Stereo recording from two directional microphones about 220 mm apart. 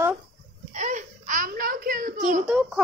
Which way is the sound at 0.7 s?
35° right (ahead or behind).